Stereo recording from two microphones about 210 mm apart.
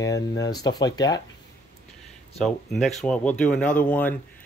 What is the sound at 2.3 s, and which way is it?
Speech, centre (ahead or behind).